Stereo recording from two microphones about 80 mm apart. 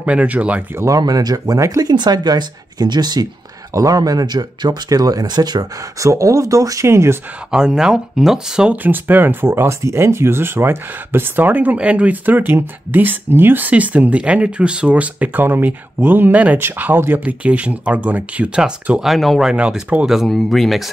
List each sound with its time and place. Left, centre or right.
0.0 s speech: centre
0.7 s speech: right
1.9 s speech: right
3.7 s speech: right
5.9 s speech: right
7.5 s speech: centre
8.8 s speech: right
17.2 s speech: centre
19.5 s speech: centre
20.2 s speech: centre